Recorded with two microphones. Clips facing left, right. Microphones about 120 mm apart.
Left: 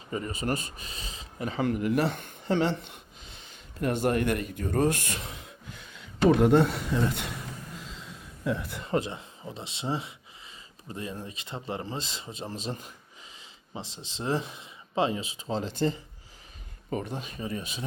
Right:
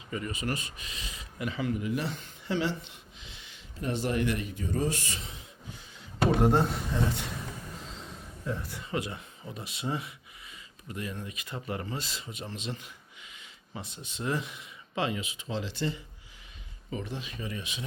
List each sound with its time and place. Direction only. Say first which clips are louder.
0.1 s speech: left 3 dB; 35° left (ahead or behind)
1.5 s speech: left 6 dB; 60° left (ahead or behind)
8.4 s a man's voice: left 5 dB; 65° left (ahead or behind)
8.9 s speech: left 5 dB; 30° left (ahead or behind); by 17.3 s 45° left (ahead or behind)
17.4 s speech: left 3 dB; 35° left (ahead or behind)